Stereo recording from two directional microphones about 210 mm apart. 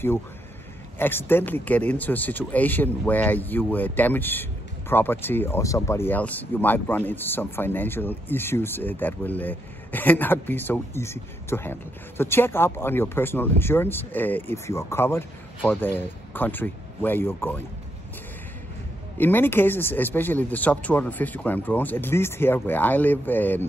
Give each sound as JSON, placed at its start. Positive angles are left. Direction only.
{"t": 0.9, "sound": "speech", "side_deg": 10}
{"t": 19.1, "sound": "speech", "side_deg": 10}